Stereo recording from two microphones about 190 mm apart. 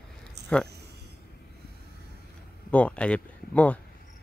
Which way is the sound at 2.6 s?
5° left (ahead or behind).